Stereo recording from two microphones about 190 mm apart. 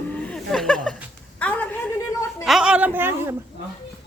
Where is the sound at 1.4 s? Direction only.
10° left (ahead or behind).